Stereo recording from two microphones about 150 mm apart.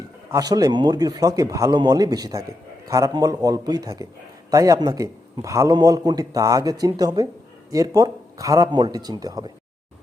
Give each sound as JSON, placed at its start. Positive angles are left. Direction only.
{"t": 0.3, "sound": "a man's voice", "side_deg": -25}